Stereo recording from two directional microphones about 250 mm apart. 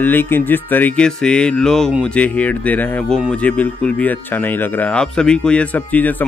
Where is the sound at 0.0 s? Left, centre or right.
Centre.